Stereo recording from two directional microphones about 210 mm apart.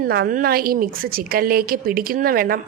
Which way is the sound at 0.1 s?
45° right (ahead or behind).